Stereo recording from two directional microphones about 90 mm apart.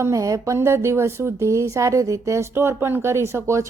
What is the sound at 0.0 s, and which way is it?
A woman's voice, 35° right (ahead or behind).